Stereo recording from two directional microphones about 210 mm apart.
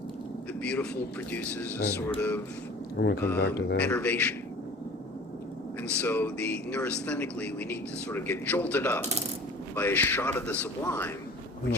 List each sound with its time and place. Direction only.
0.6 s a man's voice: 5° left (ahead or behind)
3.0 s speech: 55° left (ahead or behind)
3.8 s speech: 5° left (ahead or behind)
6.0 s speech: 10° left (ahead or behind)